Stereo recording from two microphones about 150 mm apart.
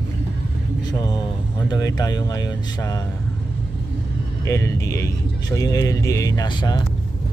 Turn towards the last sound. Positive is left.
turn(degrees=30)  # may be behind; listen again after turning